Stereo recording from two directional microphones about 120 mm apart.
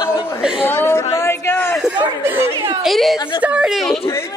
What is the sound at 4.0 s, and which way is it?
Speech, 20° left (ahead or behind).